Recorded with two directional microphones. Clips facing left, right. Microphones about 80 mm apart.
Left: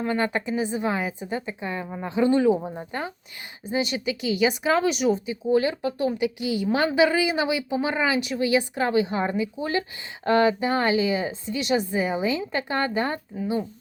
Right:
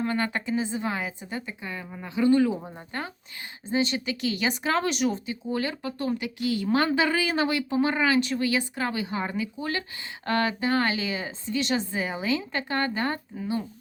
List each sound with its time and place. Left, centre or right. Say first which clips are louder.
0.0 s a woman's voice: left 3 dB; centre